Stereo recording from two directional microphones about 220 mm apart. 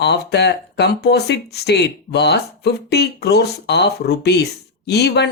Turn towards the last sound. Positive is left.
turn(degrees=50)  # may be behind; listen again after turning